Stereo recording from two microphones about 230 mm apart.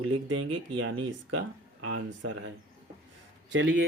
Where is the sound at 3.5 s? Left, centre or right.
Right.